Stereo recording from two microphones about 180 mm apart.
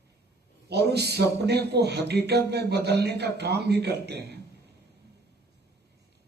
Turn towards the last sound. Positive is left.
turn(degrees=-65)  # may be behind; listen again after turning